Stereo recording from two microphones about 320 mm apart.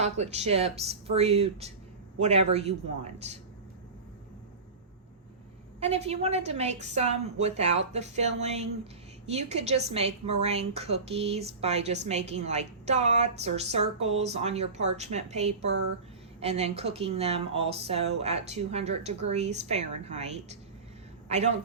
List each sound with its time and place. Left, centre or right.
0.0 s a woman's voice: centre
5.8 s a woman's voice: centre